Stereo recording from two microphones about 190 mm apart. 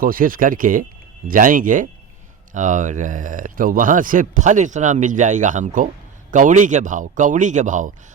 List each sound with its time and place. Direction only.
0.0 s speech: 50° right (ahead or behind)